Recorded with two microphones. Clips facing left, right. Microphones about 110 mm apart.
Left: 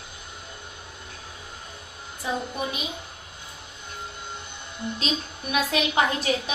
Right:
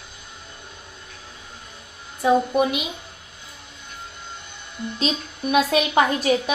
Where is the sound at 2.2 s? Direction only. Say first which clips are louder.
Right 11 dB; 65° right (ahead or behind).